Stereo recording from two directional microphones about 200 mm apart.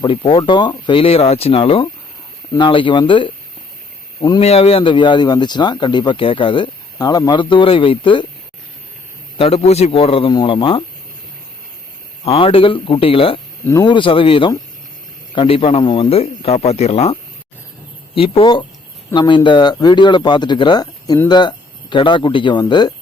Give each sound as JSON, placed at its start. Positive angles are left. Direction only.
{"t": 0.0, "sound": "speech", "side_deg": 25}
{"t": 9.4, "sound": "speech", "side_deg": 30}
{"t": 12.2, "sound": "speech", "side_deg": 30}